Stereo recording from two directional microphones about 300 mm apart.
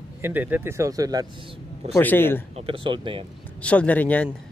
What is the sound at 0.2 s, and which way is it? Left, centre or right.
Speech, centre.